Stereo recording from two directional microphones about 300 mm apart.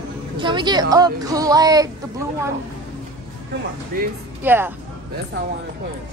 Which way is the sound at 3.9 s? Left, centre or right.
Right.